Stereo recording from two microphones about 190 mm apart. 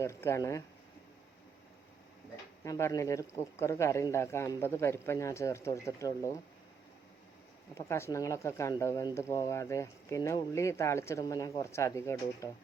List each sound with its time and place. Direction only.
0.0 s speech: 15° left (ahead or behind)
2.6 s speech: 15° left (ahead or behind)
7.8 s speech: 15° left (ahead or behind)